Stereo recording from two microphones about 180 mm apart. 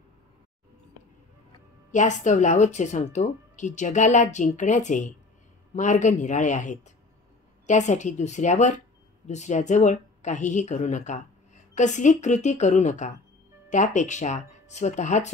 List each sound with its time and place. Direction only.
1.9 s speech: 45° left (ahead or behind)